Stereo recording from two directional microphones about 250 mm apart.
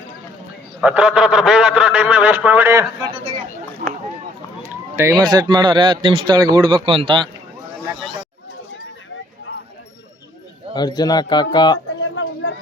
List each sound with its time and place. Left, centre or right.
0.8 s a man's voice: centre
3.8 s a sound: right
4.7 s run: centre
5.2 s a man's voice: centre
10.8 s a man's voice: centre
11.9 s a sound: left